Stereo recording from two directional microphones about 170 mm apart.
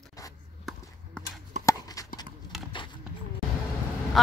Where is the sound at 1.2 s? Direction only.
5° left (ahead or behind).